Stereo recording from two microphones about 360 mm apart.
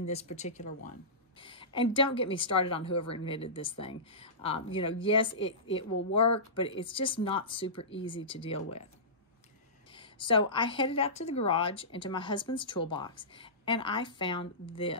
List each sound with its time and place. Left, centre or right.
0.0 s a woman's voice: centre
9.9 s a woman's voice: centre